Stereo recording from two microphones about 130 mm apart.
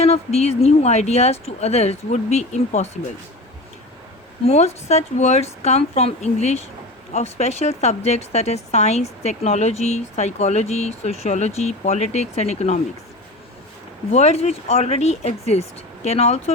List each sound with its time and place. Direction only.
0.0 s speech: 55° left (ahead or behind)
4.4 s speech: 55° left (ahead or behind)
14.1 s speech: 55° left (ahead or behind)